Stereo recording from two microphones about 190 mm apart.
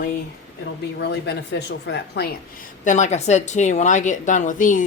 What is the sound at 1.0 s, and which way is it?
Speech, 60° left (ahead or behind).